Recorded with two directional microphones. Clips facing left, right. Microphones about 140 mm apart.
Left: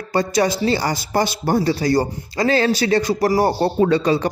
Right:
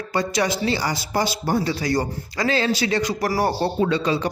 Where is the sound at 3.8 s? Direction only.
45° left (ahead or behind).